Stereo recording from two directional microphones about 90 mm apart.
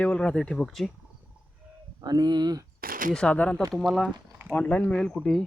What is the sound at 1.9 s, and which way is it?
Speech, 45° right (ahead or behind).